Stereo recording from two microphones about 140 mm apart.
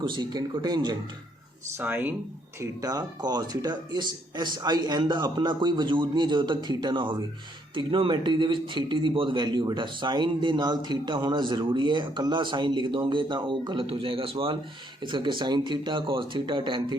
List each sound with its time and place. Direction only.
0.1 s speech: 30° right (ahead or behind)
1.8 s speech: 10° right (ahead or behind)
2.6 s speech: 25° right (ahead or behind)